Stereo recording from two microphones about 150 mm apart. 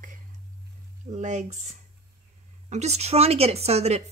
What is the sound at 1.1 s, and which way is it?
Speech, 50° right (ahead or behind).